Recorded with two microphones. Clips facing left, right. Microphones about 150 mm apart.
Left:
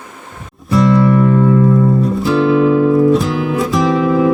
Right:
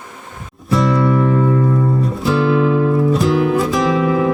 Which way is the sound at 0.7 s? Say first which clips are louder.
Left 4 dB; centre (ahead or behind).